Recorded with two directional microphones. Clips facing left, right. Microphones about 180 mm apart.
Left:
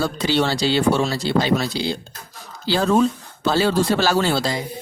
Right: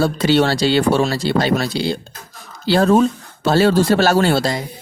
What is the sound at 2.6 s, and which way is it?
Speech, 60° right (ahead or behind).